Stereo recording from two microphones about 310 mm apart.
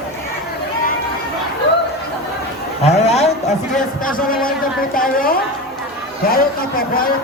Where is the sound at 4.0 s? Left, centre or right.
Left.